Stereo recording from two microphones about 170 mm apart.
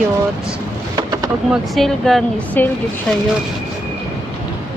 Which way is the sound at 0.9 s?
20° right (ahead or behind).